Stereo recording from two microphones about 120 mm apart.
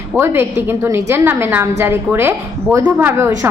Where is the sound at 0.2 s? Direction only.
20° right (ahead or behind).